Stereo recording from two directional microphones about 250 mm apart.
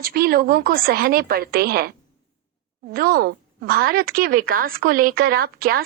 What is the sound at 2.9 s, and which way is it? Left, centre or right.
Speech, right.